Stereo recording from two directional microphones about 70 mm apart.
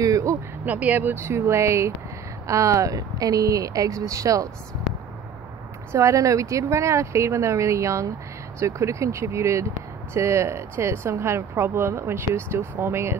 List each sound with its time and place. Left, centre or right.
0.0 s a sound: right
0.7 s speech: right
1.1 s speech: right
5.9 s speech: right